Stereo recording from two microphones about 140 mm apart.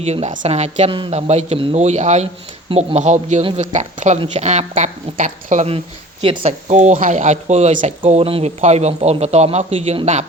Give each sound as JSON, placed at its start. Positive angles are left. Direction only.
{"t": 0.0, "sound": "speech", "side_deg": -50}
{"t": 6.2, "sound": "speech", "side_deg": -35}
{"t": 6.7, "sound": "speech", "side_deg": -60}